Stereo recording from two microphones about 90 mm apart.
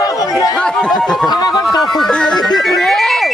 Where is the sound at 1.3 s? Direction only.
45° left (ahead or behind).